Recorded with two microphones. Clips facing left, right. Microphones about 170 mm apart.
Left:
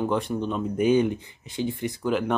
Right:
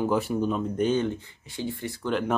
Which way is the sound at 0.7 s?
10° left (ahead or behind).